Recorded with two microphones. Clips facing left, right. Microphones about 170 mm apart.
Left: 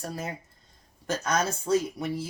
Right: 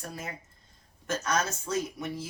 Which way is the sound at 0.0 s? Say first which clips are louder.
Left 5 dB; 35° left (ahead or behind).